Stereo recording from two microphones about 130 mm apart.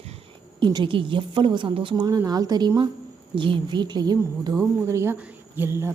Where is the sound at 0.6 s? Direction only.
35° right (ahead or behind).